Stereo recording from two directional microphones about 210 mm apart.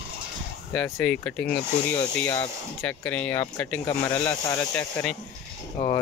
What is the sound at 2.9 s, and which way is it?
Speech, 10° left (ahead or behind).